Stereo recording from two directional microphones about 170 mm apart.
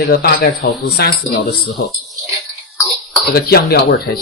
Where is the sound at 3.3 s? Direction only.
65° left (ahead or behind).